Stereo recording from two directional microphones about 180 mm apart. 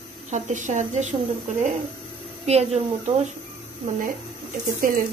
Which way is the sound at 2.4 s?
35° right (ahead or behind).